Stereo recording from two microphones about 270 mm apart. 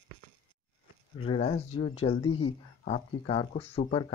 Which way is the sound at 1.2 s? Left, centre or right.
Centre.